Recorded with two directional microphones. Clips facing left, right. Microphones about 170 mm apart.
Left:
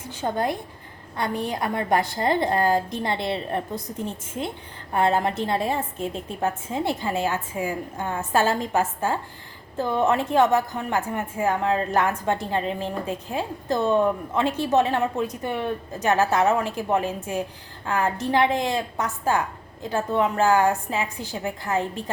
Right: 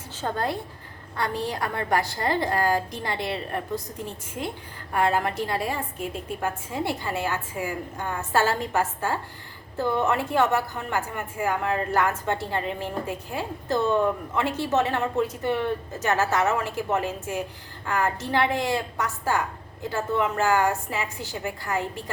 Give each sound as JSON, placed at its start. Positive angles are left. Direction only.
{"t": 0.2, "sound": "a woman's voice", "side_deg": 15}